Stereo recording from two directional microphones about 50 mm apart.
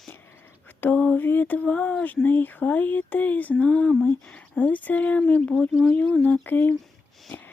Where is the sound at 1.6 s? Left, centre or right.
Left.